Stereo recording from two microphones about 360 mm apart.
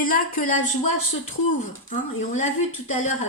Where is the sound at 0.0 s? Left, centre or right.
Left.